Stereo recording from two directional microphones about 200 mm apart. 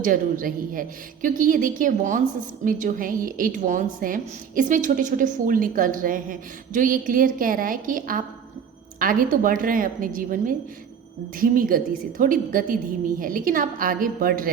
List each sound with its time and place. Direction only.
0.0 s a woman's voice: 45° right (ahead or behind)